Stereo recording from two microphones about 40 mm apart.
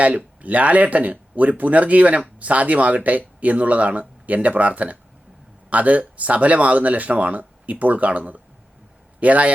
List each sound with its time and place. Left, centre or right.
0.0 s speech: right